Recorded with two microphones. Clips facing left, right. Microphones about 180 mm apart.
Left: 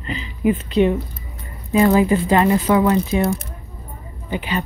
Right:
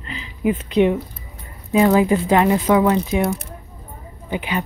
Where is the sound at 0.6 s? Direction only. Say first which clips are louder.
Even; 15° right (ahead or behind).